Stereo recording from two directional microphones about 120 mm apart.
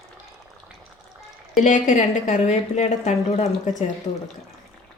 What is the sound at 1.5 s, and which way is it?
A woman's voice, 90° left.